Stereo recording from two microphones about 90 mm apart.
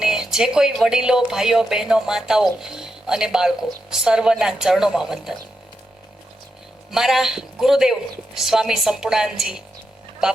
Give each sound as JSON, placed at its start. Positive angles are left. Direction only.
{"t": 0.0, "sound": "speech", "side_deg": -5}
{"t": 6.9, "sound": "speech", "side_deg": -5}